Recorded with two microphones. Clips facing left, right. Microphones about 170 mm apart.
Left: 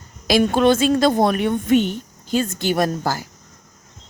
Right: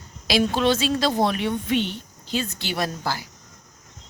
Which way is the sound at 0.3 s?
50° left (ahead or behind).